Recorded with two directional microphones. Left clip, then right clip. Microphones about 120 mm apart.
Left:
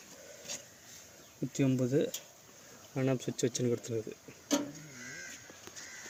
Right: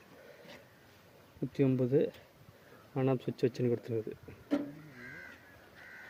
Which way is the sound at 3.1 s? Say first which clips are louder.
Right 1 dB; 35° right (ahead or behind).